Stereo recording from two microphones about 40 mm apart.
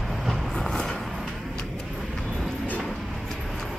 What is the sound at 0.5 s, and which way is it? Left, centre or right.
Vehicle, centre.